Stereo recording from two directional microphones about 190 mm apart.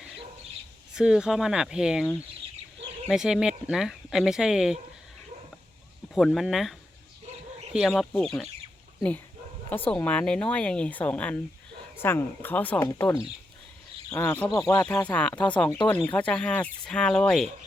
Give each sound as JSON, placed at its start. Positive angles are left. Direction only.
{"t": 0.9, "sound": "speech", "side_deg": -5}
{"t": 6.1, "sound": "speech", "side_deg": 0}
{"t": 9.6, "sound": "a woman's voice", "side_deg": 10}